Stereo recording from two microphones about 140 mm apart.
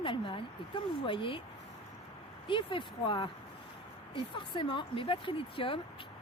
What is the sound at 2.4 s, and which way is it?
Speech, 35° left (ahead or behind).